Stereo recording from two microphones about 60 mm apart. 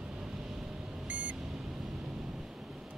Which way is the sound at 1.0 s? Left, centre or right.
Right.